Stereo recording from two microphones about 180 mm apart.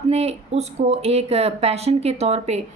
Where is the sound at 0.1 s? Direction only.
35° right (ahead or behind).